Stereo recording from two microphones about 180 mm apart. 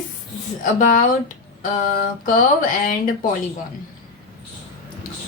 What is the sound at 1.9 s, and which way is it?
Mantra, 55° left (ahead or behind).